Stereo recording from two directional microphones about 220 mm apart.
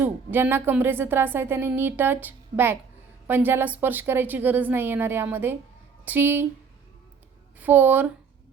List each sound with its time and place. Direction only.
0.0 s speech: 10° right (ahead or behind)
7.6 s speech: 10° right (ahead or behind)